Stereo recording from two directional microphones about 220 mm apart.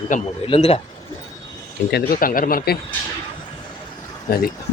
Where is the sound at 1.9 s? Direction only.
40° left (ahead or behind).